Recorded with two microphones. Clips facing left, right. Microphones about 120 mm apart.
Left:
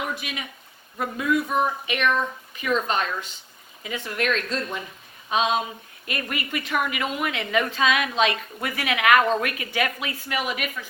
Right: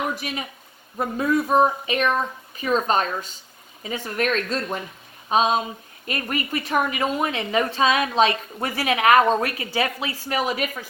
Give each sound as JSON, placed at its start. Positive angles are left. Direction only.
{"t": 0.2, "sound": "a woman's voice", "side_deg": -35}